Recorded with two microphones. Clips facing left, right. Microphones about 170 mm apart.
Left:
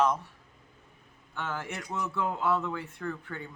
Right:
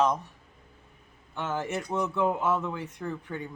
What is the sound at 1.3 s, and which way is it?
Speech, 20° right (ahead or behind).